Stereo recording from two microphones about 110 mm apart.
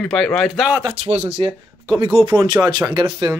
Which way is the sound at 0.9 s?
75° right (ahead or behind).